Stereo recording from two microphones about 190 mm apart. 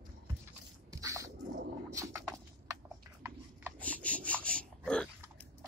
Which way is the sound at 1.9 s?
15° right (ahead or behind).